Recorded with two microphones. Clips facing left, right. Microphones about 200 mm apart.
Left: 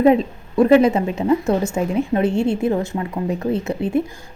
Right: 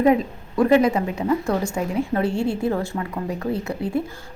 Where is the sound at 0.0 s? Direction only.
25° left (ahead or behind).